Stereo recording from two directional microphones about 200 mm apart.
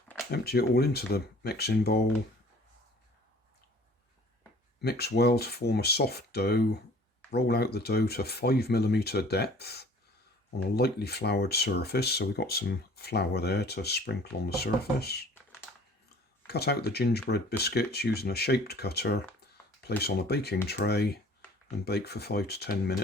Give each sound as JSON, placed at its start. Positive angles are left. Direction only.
{"t": 0.3, "sound": "speech", "side_deg": 50}
{"t": 4.8, "sound": "speech", "side_deg": 55}
{"t": 16.5, "sound": "speech", "side_deg": 55}